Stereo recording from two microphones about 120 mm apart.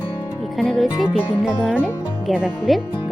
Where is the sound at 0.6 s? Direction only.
Centre (ahead or behind).